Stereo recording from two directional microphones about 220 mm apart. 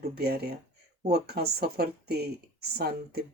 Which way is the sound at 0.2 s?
45° right (ahead or behind).